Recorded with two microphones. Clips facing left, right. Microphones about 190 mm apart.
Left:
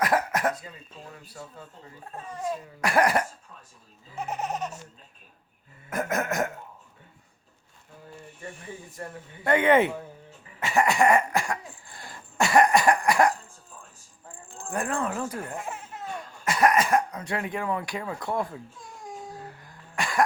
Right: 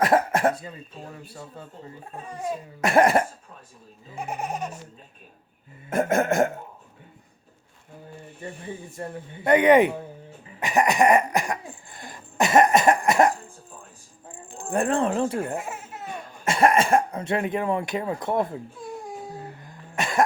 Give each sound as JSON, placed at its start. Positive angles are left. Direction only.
{"t": 0.0, "sound": "cough", "side_deg": -25}
{"t": 1.6, "sound": "speech", "side_deg": -30}
{"t": 2.8, "sound": "speech", "side_deg": -25}
{"t": 4.2, "sound": "baby laughter", "side_deg": -10}
{"t": 5.9, "sound": "speech", "side_deg": -30}
{"t": 8.4, "sound": "speech", "side_deg": -25}
{"t": 10.6, "sound": "cough", "side_deg": -20}
{"t": 14.3, "sound": "speech", "side_deg": -20}
{"t": 15.5, "sound": "baby laughter", "side_deg": -5}
{"t": 16.3, "sound": "speech", "side_deg": -25}
{"t": 19.5, "sound": "cough", "side_deg": -20}